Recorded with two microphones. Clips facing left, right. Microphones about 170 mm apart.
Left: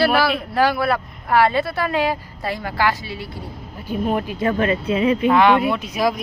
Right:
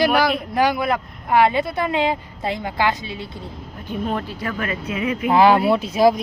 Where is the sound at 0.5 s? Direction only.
15° right (ahead or behind).